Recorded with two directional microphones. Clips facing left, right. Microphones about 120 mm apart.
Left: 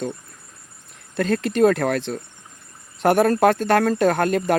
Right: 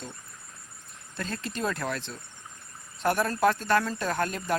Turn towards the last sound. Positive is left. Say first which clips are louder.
# left 10 dB
turn(degrees=70)  # may be behind; listen again after turning